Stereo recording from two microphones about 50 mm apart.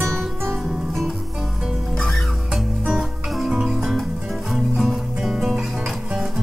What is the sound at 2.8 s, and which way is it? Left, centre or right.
Music, centre.